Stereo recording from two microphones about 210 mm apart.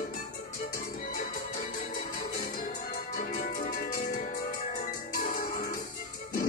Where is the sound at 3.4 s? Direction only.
40° left (ahead or behind).